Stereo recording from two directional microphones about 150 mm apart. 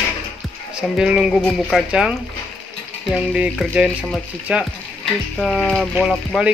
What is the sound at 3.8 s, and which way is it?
Speech, 5° left (ahead or behind).